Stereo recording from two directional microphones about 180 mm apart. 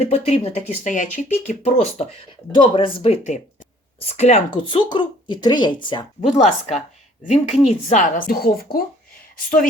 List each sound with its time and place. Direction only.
0.0 s speech: 35° left (ahead or behind)
6.2 s a woman's voice: 40° left (ahead or behind)